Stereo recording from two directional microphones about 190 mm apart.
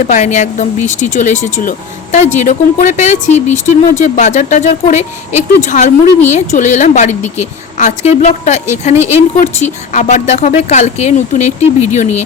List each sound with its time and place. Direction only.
0.1 s speech: 40° left (ahead or behind)